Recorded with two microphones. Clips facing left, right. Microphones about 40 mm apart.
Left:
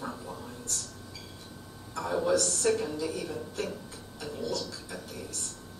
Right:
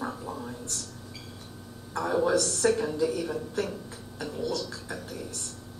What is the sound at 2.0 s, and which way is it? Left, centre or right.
Speech, centre.